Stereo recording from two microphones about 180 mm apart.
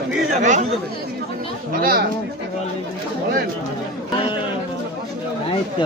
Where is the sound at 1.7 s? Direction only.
55° right (ahead or behind).